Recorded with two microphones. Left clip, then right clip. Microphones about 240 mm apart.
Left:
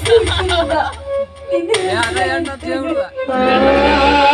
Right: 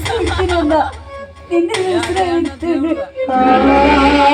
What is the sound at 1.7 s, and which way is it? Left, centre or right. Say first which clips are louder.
Speech: even; centre.